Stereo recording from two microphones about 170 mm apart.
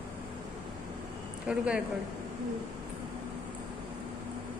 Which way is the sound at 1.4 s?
5° right (ahead or behind).